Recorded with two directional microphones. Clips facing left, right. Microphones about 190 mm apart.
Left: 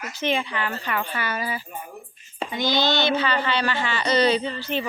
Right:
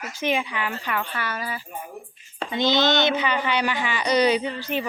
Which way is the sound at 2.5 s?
25° right (ahead or behind).